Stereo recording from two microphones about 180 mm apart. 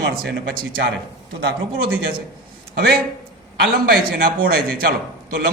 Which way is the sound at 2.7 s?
60° right (ahead or behind).